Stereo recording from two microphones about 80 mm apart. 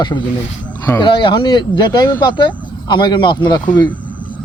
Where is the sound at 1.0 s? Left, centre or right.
Left.